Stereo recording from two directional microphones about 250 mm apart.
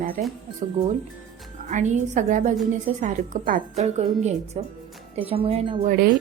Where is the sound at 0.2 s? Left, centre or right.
Right.